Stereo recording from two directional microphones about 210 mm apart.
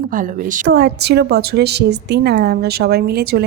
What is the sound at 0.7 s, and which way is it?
A woman's voice, 50° right (ahead or behind).